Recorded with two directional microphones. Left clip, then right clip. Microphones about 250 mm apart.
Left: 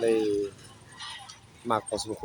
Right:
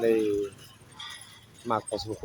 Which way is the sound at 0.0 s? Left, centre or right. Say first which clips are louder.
Even; centre.